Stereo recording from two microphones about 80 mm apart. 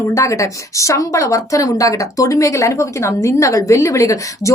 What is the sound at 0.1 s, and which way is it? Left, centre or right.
A woman's voice, left.